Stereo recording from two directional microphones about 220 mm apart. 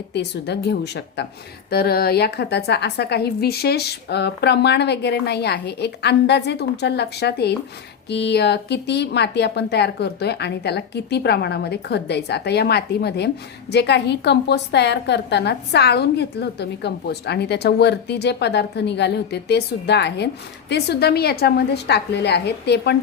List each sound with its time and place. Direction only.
0.1 s speech: 50° left (ahead or behind)